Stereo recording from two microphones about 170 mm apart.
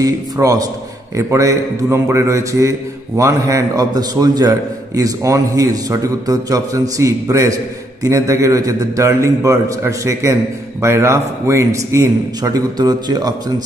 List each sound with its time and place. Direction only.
0.0 s a man's voice: 20° right (ahead or behind)